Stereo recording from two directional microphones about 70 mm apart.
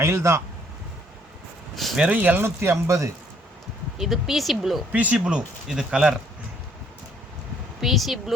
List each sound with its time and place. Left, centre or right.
0.0 s speech: right
1.7 s a sound: centre
2.0 s speech: right
2.4 s speech: right
3.9 s speech: centre
4.9 s speech: right
7.8 s speech: centre